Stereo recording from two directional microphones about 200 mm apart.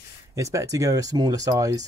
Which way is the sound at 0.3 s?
15° right (ahead or behind).